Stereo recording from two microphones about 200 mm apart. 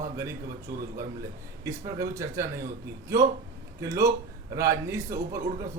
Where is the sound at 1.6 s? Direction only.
15° right (ahead or behind).